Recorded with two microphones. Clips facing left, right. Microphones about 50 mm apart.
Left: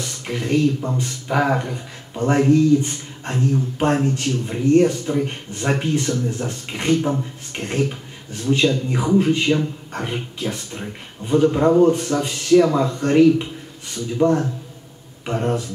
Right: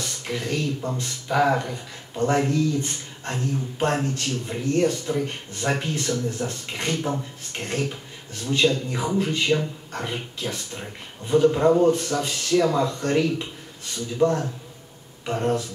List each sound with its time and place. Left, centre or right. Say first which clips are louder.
0.0 s speech: left 3 dB; centre
4.5 s speech: left 7 dB; centre
11.9 s speech: left 3 dB; left